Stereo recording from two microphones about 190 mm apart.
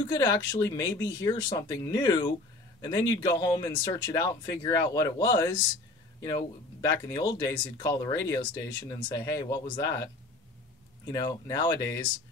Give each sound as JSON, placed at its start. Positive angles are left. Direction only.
{"t": 0.1, "sound": "speech", "side_deg": 20}
{"t": 6.8, "sound": "speech", "side_deg": 20}
{"t": 11.1, "sound": "speech", "side_deg": 20}